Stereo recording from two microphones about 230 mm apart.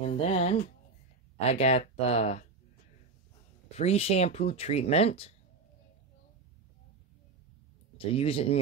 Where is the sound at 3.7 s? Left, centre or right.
Left.